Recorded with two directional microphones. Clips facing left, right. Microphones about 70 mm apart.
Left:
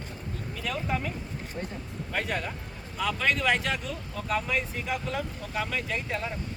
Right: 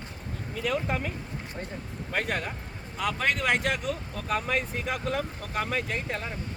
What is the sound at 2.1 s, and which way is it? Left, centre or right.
Speech, right.